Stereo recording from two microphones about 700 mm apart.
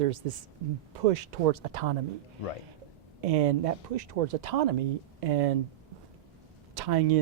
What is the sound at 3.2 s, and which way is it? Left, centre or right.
Speech, right.